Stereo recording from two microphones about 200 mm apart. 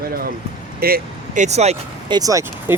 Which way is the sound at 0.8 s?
50° right (ahead or behind).